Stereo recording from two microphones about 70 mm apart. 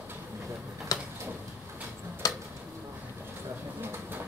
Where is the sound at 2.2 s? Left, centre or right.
Left.